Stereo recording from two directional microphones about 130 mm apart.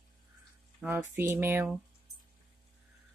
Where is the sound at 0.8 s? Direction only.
20° right (ahead or behind).